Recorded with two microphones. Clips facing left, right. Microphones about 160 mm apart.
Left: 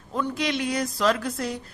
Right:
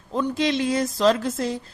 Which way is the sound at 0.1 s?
25° right (ahead or behind).